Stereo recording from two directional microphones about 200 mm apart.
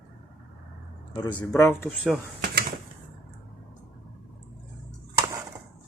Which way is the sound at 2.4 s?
50° right (ahead or behind).